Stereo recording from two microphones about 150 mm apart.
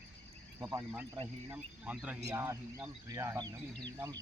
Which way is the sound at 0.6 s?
20° right (ahead or behind).